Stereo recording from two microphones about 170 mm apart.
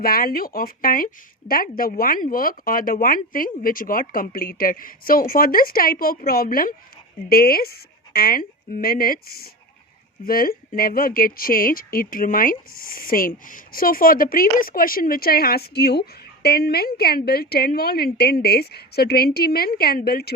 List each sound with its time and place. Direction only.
0.0 s speech: 60° left (ahead or behind)